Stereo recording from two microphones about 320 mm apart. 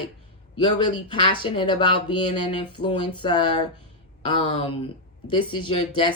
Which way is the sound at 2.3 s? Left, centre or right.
Left.